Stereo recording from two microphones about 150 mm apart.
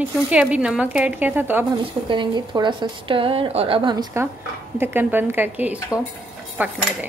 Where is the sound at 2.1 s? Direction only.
30° right (ahead or behind).